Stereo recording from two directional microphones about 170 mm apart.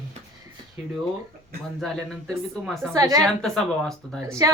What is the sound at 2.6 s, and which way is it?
Speech, centre (ahead or behind).